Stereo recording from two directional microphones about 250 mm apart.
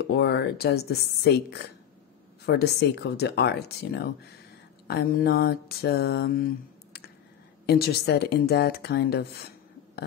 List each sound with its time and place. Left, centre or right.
0.1 s mantra: left